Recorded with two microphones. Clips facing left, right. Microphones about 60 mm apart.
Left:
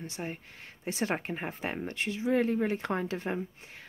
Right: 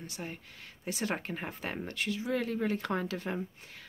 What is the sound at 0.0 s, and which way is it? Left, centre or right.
Speech, left.